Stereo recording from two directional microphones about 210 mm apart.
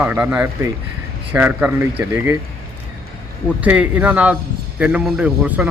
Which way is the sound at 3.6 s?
5° right (ahead or behind).